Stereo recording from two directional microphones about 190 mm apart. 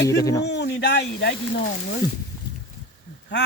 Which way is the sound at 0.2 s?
15° left (ahead or behind).